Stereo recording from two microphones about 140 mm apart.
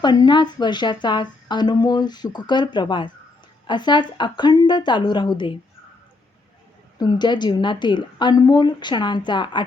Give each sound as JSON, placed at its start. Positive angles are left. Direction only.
{"t": 0.0, "sound": "a woman's voice", "side_deg": 30}
{"t": 7.0, "sound": "a woman's voice", "side_deg": 30}